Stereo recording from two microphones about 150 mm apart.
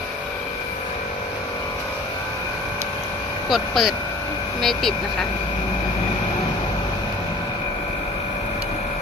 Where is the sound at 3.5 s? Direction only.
Centre (ahead or behind).